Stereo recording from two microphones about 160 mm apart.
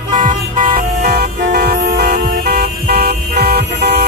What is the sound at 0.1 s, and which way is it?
Vehicle, 55° right (ahead or behind).